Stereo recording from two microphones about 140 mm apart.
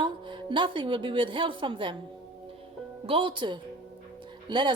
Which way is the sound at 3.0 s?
40° right (ahead or behind).